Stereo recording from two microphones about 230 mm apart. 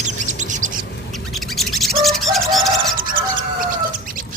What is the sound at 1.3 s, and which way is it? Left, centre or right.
Bird, centre.